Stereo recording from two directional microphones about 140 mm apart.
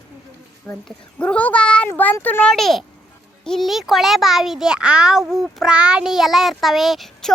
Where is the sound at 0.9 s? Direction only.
10° left (ahead or behind).